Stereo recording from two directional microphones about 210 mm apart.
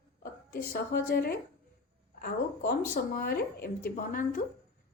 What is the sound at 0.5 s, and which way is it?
Speech, 45° left (ahead or behind).